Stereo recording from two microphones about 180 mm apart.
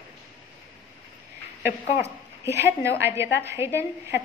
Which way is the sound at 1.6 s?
15° right (ahead or behind).